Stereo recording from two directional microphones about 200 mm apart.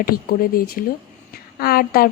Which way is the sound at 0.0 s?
45° left (ahead or behind).